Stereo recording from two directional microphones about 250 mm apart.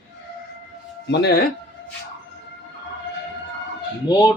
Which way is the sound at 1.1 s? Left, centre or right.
Left.